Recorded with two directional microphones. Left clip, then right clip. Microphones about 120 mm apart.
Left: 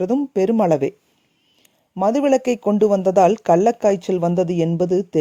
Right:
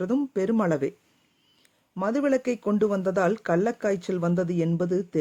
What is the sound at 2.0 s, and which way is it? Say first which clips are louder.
Speech: left 8 dB; 45° left (ahead or behind).